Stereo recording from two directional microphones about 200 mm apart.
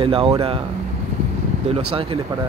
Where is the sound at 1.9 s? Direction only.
30° right (ahead or behind).